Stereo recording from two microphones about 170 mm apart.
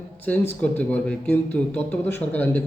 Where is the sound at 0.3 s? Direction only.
10° left (ahead or behind).